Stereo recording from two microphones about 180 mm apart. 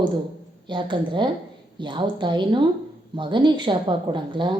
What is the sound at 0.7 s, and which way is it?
Speech, 25° right (ahead or behind).